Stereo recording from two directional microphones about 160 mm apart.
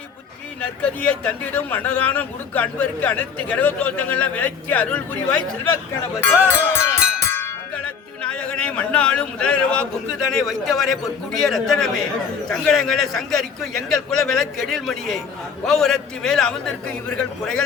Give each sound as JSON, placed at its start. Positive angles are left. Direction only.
{"t": 1.2, "sound": "a man's voice", "side_deg": 10}
{"t": 7.3, "sound": "music", "side_deg": 15}
{"t": 8.2, "sound": "a man's voice", "side_deg": 5}